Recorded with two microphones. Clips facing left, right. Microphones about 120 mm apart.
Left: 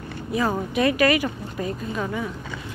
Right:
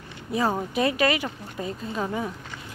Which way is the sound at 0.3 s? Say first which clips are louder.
Left 1 dB; 30° right (ahead or behind).